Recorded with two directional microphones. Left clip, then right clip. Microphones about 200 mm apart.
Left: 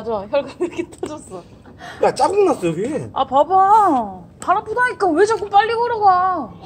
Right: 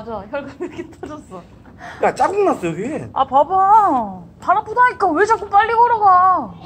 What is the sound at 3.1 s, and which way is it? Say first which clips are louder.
A woman's voice: even; 25° left (ahead or behind).